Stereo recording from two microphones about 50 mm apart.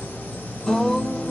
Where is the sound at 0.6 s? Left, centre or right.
Centre.